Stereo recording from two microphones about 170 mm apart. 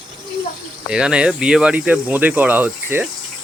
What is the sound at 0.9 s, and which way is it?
Speech, 5° right (ahead or behind).